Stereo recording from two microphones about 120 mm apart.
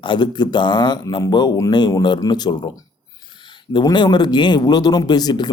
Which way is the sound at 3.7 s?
40° left (ahead or behind).